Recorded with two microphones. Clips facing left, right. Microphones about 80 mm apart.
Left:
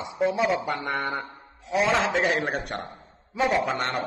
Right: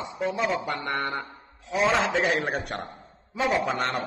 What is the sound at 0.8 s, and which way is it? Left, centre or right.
A man's voice, centre.